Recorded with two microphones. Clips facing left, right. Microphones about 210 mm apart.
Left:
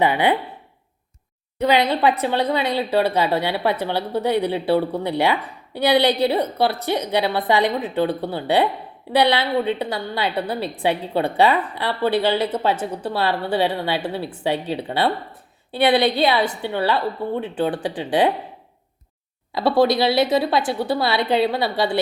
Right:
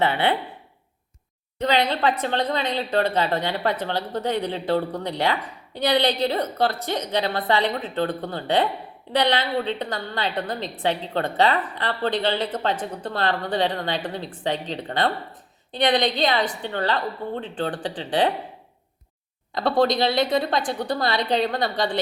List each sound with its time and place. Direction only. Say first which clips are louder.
0.0 s a woman's voice: left 3 dB; 15° left (ahead or behind)
1.5 s a woman's voice: left 4 dB; 10° left (ahead or behind)
19.8 s a woman's voice: left 3 dB; 5° left (ahead or behind)